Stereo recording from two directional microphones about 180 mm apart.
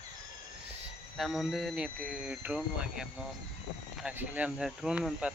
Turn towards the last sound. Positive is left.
turn(degrees=-5)  # may be behind; listen again after turning